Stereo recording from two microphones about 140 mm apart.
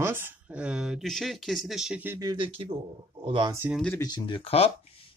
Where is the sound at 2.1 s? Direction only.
30° right (ahead or behind).